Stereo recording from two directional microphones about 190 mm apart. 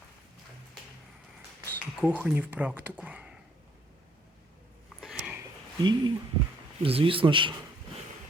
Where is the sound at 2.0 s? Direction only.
10° right (ahead or behind).